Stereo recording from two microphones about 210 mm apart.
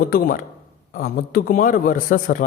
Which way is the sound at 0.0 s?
45° left (ahead or behind).